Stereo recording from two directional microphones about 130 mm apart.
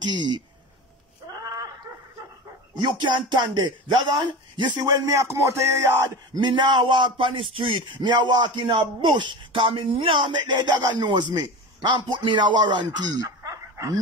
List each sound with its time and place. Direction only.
0.0 s a man's voice: 35° right (ahead or behind)
1.4 s a sound: 25° right (ahead or behind)
2.7 s a man's voice: 35° right (ahead or behind)
6.4 s a man's voice: 35° right (ahead or behind)